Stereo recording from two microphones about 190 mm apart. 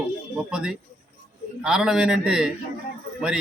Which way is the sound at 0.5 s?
5° right (ahead or behind).